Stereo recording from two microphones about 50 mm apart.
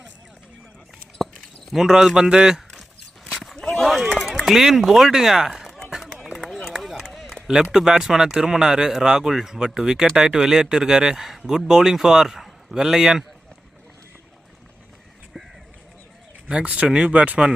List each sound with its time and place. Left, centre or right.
1.7 s speech: centre
3.3 s a sound: centre
3.8 s speech: centre
5.9 s run: centre
6.3 s run: centre
6.6 s a sound: centre
7.4 s speech: centre
16.5 s speech: right